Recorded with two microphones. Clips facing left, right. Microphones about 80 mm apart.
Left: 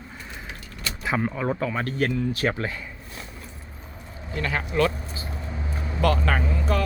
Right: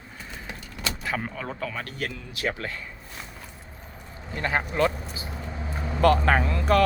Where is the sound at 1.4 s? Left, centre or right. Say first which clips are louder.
Left 6 dB; left.